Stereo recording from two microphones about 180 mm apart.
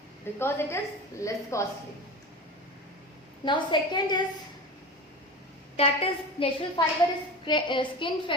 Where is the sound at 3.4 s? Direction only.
25° left (ahead or behind).